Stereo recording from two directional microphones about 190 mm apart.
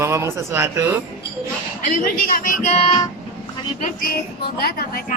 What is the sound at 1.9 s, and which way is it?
Speech, 45° left (ahead or behind).